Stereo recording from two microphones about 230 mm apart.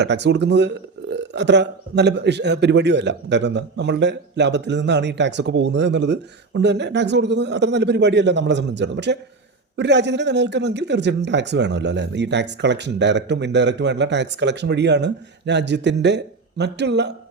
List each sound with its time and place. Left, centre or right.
0.0 s a man's voice: right